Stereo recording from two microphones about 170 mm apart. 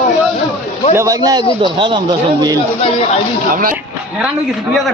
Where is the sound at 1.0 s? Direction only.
20° right (ahead or behind).